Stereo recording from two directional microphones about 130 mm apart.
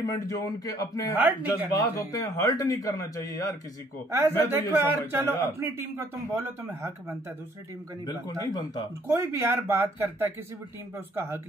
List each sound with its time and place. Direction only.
0.0 s a man's voice: 25° left (ahead or behind)
1.1 s speech: 15° right (ahead or behind)
1.7 s a man's voice: 25° left (ahead or behind)
4.5 s a man's voice: 20° right (ahead or behind)
8.1 s a man's voice: 30° left (ahead or behind)
9.0 s a man's voice: 20° right (ahead or behind)